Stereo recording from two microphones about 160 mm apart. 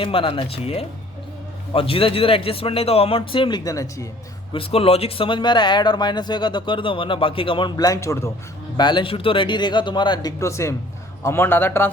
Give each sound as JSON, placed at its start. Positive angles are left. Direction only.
{"t": 0.0, "sound": "speech", "side_deg": 35}
{"t": 4.5, "sound": "speech", "side_deg": 35}
{"t": 8.8, "sound": "a man's voice", "side_deg": 30}